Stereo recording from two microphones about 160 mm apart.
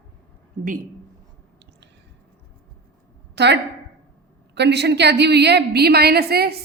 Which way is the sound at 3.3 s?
90° right.